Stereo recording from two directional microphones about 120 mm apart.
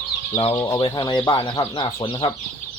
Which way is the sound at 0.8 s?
40° left (ahead or behind).